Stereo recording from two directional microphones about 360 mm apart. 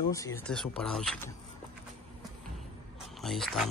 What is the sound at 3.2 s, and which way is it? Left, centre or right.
Speech, centre.